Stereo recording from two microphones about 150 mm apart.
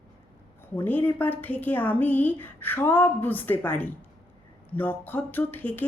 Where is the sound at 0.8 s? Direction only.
10° left (ahead or behind).